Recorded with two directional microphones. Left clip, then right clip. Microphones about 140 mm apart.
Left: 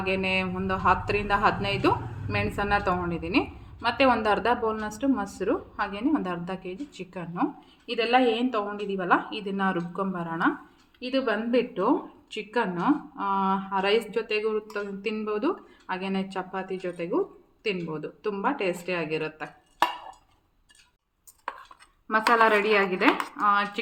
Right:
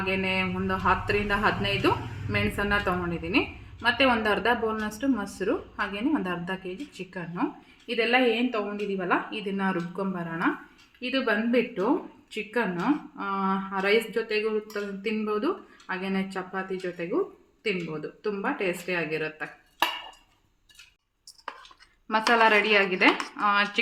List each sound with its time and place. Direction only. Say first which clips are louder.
0.0 s speech: left 1 dB; 15° right (ahead or behind)
22.3 s speech: even; 10° right (ahead or behind)